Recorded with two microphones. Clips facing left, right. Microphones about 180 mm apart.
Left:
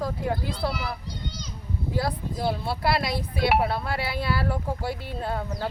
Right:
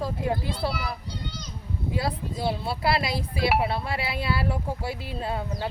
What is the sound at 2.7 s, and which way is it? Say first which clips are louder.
Speech: even; 25° right (ahead or behind).